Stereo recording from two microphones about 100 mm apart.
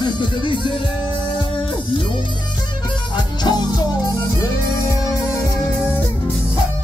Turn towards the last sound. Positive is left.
turn(degrees=30)  # may be behind; listen again after turning